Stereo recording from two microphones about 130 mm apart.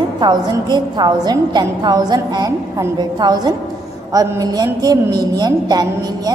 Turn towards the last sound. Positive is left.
turn(degrees=-30)  # may be behind; listen again after turning